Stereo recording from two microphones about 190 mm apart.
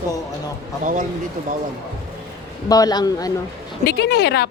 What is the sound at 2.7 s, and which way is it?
Speech, 20° left (ahead or behind).